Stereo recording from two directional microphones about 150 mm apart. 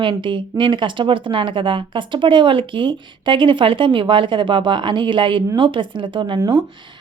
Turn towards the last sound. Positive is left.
turn(degrees=-30)  # may be behind; listen again after turning